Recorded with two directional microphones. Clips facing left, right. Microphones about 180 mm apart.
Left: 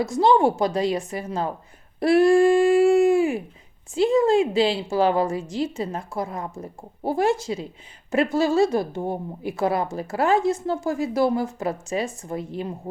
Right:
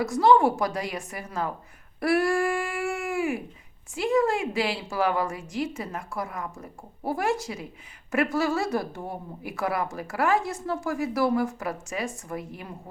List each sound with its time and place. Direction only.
0.1 s a woman's voice: 25° left (ahead or behind)
2.0 s a sound: 25° left (ahead or behind)
3.9 s a woman's voice: 25° left (ahead or behind)